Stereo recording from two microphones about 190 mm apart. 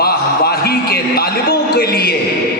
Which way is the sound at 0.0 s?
55° left (ahead or behind).